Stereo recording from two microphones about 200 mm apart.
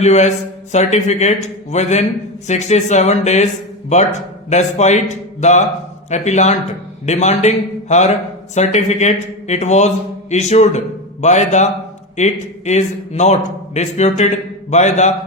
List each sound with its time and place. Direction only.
0.0 s a man's voice: 35° left (ahead or behind)
4.4 s a man's voice: 35° left (ahead or behind)